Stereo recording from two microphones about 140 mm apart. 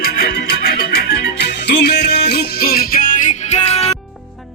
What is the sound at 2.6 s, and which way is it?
Music, 90° left.